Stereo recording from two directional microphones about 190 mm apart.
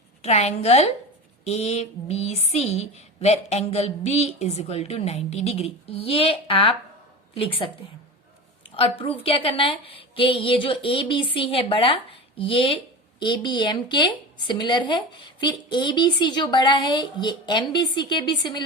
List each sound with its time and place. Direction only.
0.2 s a woman's voice: 35° left (ahead or behind)
8.7 s a woman's voice: 30° left (ahead or behind)